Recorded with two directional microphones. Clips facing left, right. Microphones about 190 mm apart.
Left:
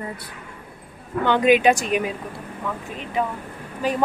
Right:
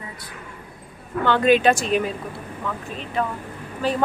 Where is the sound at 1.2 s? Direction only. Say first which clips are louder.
Even; 15° left (ahead or behind).